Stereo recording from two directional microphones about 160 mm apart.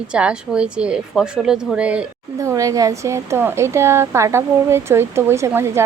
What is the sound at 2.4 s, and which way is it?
A woman's voice, 20° right (ahead or behind).